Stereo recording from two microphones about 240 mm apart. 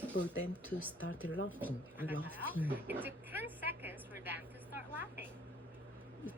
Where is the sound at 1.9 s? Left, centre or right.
Centre.